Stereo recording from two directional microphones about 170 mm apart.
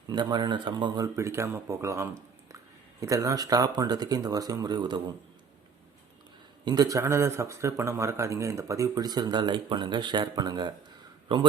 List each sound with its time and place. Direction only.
0.1 s a man's voice: 25° right (ahead or behind)
6.7 s a man's voice: 20° right (ahead or behind)